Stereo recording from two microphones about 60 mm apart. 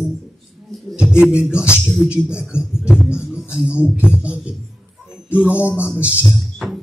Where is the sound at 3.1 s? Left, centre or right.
Centre.